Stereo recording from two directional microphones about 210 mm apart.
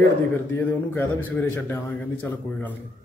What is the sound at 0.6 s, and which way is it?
Speech, 10° left (ahead or behind).